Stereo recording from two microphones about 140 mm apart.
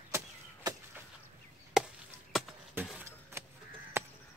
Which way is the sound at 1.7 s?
5° right (ahead or behind).